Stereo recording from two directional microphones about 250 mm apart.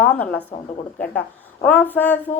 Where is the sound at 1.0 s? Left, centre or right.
Centre.